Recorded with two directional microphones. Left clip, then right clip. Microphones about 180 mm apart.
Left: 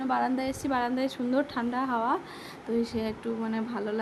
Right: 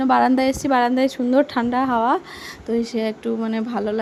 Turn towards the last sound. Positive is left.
turn(degrees=-35)  # may be behind; listen again after turning